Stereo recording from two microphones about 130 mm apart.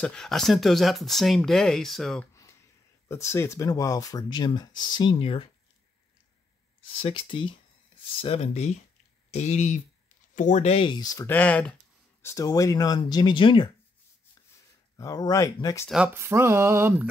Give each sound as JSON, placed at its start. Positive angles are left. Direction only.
{"t": 0.0, "sound": "speech", "side_deg": 5}
{"t": 3.1, "sound": "speech", "side_deg": 20}
{"t": 7.0, "sound": "speech", "side_deg": 45}
{"t": 11.0, "sound": "speech", "side_deg": 30}
{"t": 11.2, "sound": "speech", "side_deg": 10}
{"t": 12.2, "sound": "speech", "side_deg": 20}
{"t": 15.0, "sound": "speech", "side_deg": 25}
{"t": 16.2, "sound": "mantra", "side_deg": -20}